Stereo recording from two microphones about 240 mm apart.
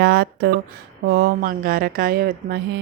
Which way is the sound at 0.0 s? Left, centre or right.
Right.